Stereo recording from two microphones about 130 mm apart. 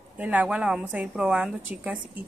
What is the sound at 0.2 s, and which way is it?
A woman's voice, 10° right (ahead or behind).